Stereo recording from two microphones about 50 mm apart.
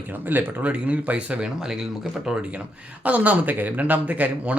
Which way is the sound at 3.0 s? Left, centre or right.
Right.